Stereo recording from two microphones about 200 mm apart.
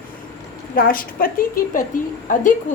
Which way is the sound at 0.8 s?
45° left (ahead or behind).